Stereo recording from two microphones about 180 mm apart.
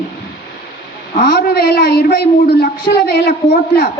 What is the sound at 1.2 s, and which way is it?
A woman's voice, 60° left (ahead or behind).